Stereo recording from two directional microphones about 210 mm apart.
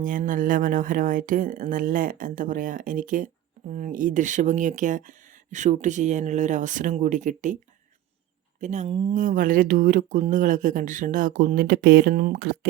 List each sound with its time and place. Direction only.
0.0 s speech: 40° right (ahead or behind)
8.6 s speech: 35° right (ahead or behind)